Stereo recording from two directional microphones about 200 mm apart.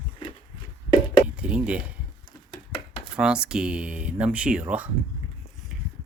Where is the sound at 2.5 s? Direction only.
25° left (ahead or behind).